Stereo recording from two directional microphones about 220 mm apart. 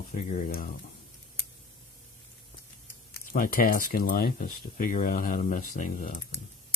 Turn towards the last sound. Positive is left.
turn(degrees=35)  # may be behind; listen again after turning